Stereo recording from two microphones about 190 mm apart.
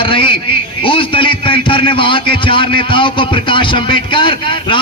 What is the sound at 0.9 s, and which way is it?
A man's voice, 25° left (ahead or behind).